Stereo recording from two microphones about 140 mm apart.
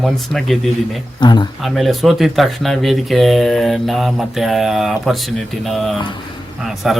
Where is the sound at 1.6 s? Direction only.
Centre (ahead or behind).